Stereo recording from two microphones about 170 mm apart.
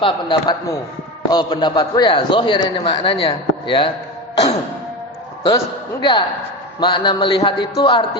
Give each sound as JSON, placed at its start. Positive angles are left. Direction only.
{"t": 0.0, "sound": "a man's voice", "side_deg": 25}
{"t": 5.5, "sound": "a man's voice", "side_deg": 25}